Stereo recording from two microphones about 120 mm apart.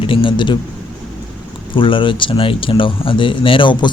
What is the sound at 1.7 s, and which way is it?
Speech, 45° left (ahead or behind).